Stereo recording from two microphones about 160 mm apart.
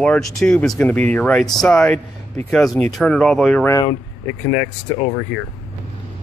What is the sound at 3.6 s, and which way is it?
Speech, 20° left (ahead or behind).